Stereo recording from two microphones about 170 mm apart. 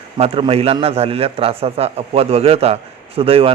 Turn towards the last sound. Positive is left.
turn(degrees=-35)  # may be behind; listen again after turning